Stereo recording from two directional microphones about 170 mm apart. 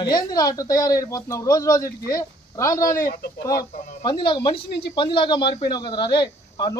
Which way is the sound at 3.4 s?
20° left (ahead or behind).